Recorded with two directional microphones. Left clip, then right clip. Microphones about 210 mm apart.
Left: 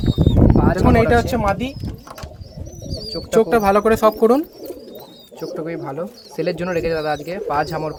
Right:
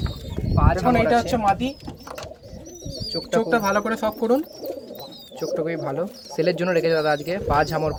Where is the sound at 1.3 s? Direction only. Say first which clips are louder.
Left 1 dB; 40° left (ahead or behind).